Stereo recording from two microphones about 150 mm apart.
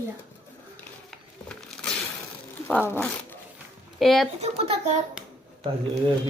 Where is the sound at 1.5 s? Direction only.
5° left (ahead or behind).